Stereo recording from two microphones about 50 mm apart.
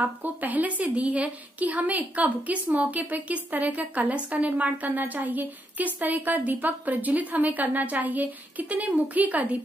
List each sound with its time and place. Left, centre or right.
0.0 s a woman's voice: right